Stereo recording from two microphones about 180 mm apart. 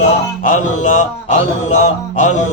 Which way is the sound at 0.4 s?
45° left (ahead or behind).